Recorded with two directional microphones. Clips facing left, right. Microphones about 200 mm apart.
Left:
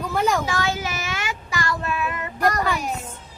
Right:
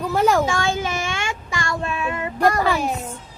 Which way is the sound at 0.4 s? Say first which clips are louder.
Right 3 dB; 25° right (ahead or behind).